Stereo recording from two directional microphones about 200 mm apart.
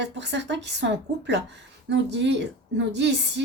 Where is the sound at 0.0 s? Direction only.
60° right (ahead or behind).